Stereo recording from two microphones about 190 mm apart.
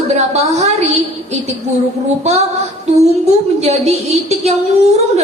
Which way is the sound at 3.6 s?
35° right (ahead or behind).